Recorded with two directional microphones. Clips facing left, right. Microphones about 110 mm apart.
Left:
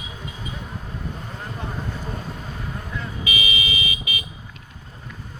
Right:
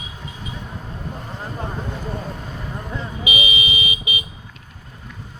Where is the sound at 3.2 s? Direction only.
20° right (ahead or behind).